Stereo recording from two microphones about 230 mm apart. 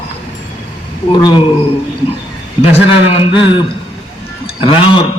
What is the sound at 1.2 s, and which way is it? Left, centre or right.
Speech, centre.